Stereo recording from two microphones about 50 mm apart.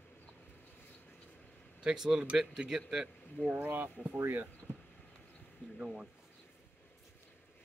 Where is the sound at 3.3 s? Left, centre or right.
Right.